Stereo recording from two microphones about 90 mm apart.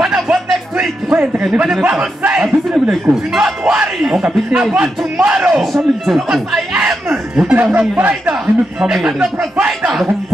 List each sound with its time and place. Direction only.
0.0 s music: 5° right (ahead or behind)
1.1 s a man's voice: 15° right (ahead or behind)
5.6 s a man's voice: centre (ahead or behind)
6.7 s a man's voice: 15° right (ahead or behind)